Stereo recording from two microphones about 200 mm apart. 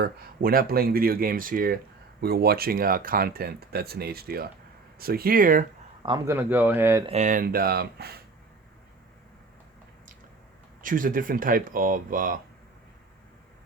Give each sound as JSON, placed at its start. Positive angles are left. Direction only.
{"t": 0.0, "sound": "speech", "side_deg": -50}
{"t": 6.0, "sound": "speech", "side_deg": -25}
{"t": 6.3, "sound": "a man's voice", "side_deg": -10}
{"t": 7.1, "sound": "speech", "side_deg": -40}
{"t": 10.8, "sound": "speech", "side_deg": -40}